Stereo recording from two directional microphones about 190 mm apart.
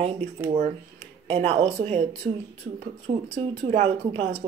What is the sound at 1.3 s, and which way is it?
Speech, 30° right (ahead or behind).